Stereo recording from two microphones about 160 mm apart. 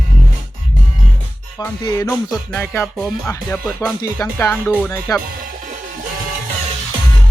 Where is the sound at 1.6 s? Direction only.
15° left (ahead or behind).